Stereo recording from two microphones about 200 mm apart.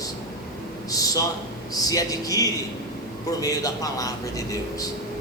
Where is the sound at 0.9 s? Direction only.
15° left (ahead or behind).